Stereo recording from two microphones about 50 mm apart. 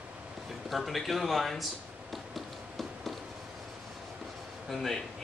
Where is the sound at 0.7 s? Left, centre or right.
Centre.